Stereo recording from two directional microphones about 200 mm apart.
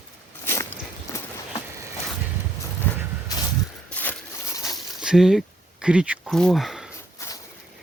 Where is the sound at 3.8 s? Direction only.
5° left (ahead or behind).